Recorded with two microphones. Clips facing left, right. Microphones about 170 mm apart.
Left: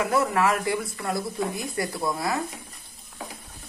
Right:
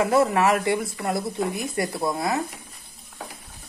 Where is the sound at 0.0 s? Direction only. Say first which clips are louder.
Right 3 dB; 25° right (ahead or behind).